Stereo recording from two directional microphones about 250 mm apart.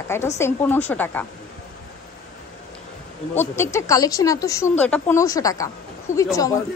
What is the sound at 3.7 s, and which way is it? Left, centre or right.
Speech, centre.